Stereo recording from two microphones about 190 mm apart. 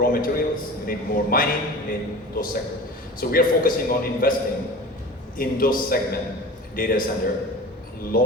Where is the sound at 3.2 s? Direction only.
50° left (ahead or behind).